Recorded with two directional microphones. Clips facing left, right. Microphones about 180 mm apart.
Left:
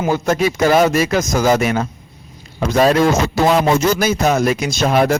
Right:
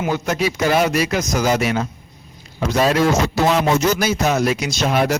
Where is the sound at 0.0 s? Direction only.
50° left (ahead or behind).